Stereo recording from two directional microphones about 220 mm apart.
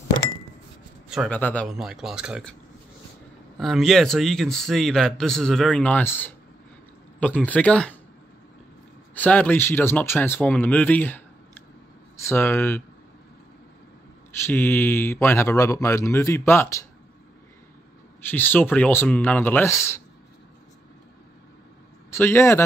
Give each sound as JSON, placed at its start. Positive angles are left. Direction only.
{"t": 1.0, "sound": "speech", "side_deg": 0}
{"t": 3.5, "sound": "speech", "side_deg": 0}
{"t": 7.4, "sound": "speech", "side_deg": 5}
{"t": 9.1, "sound": "speech", "side_deg": 5}
{"t": 14.4, "sound": "speech", "side_deg": 10}
{"t": 18.3, "sound": "speech", "side_deg": 10}
{"t": 22.1, "sound": "speech", "side_deg": 10}